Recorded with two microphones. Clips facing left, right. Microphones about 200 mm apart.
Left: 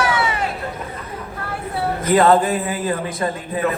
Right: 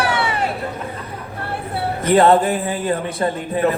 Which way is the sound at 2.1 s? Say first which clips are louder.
Right 1 dB; 30° right (ahead or behind).